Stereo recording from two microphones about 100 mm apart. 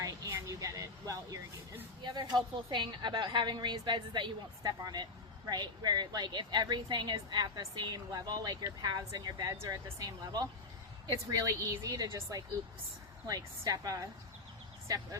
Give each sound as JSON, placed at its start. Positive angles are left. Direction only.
{"t": 0.0, "sound": "a sound", "side_deg": -35}
{"t": 2.0, "sound": "a woman's voice", "side_deg": -50}
{"t": 4.6, "sound": "a woman's voice", "side_deg": -40}